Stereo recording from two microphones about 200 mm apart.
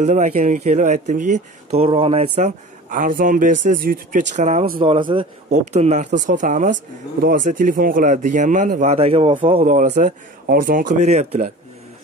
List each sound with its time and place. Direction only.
0.0 s speech: 35° right (ahead or behind)
2.9 s speech: 45° right (ahead or behind)